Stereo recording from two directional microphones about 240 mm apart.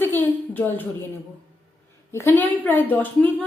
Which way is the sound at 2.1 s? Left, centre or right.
Centre.